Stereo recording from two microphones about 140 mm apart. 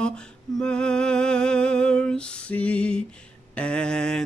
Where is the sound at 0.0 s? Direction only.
5° left (ahead or behind).